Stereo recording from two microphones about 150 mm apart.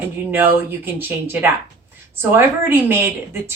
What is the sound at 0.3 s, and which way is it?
A woman's voice, 15° right (ahead or behind).